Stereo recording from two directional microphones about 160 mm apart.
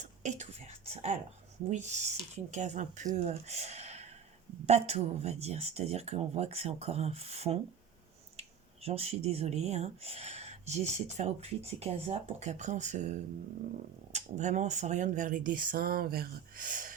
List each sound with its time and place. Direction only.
0.0 s speech: 50° right (ahead or behind)